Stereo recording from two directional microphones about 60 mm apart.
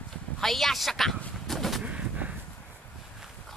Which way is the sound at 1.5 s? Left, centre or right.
Centre.